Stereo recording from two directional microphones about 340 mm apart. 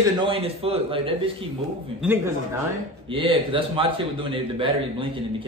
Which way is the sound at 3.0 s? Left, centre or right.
Centre.